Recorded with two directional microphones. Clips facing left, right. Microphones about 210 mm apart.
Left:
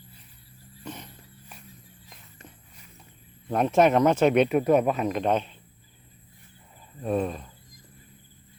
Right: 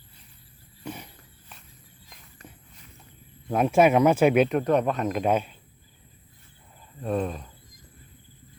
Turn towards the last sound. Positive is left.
turn(degrees=0)  # may be behind; listen again after turning